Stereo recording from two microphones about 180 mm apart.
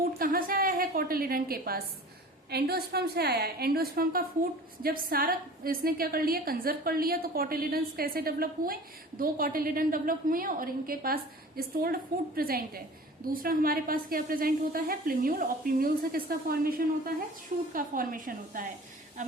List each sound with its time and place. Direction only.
0.2 s a woman's voice: 50° right (ahead or behind)